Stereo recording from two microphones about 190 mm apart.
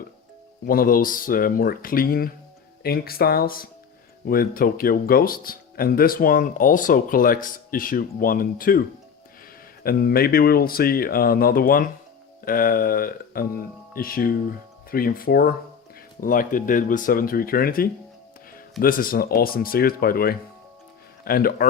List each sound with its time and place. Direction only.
0.6 s speech: 50° left (ahead or behind)
9.8 s speech: 50° left (ahead or behind)